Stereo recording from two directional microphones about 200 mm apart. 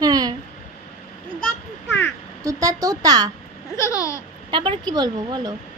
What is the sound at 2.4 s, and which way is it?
Speech, 15° right (ahead or behind).